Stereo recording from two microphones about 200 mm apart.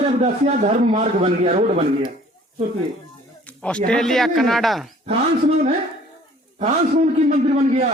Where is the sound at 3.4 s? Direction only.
5° left (ahead or behind).